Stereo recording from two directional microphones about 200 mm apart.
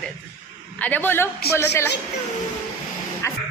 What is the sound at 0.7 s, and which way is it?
Speech, 10° left (ahead or behind).